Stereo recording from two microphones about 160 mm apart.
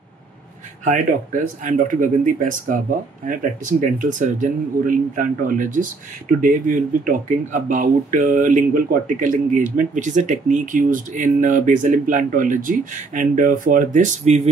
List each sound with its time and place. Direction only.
0.8 s speech: 55° right (ahead or behind)